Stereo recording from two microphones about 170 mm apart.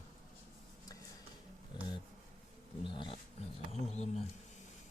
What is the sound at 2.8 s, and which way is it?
Roaring cats, 30° left (ahead or behind).